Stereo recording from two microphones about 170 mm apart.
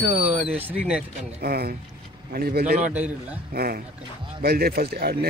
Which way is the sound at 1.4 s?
65° right (ahead or behind).